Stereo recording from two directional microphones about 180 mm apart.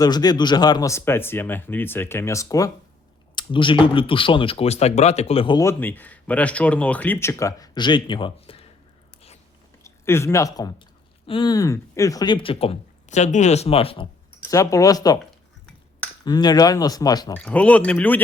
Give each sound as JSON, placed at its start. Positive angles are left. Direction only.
{"t": 0.0, "sound": "speech", "side_deg": 20}
{"t": 5.5, "sound": "speech", "side_deg": 15}
{"t": 9.8, "sound": "speech", "side_deg": 15}
{"t": 14.4, "sound": "speech", "side_deg": 20}
{"t": 16.2, "sound": "speech", "side_deg": 20}
{"t": 17.3, "sound": "speech", "side_deg": 5}